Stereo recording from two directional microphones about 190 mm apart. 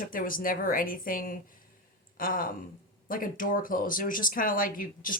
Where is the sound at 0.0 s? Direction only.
45° left (ahead or behind).